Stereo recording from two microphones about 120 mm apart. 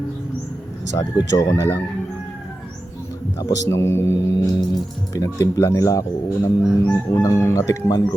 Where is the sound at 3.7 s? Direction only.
25° left (ahead or behind).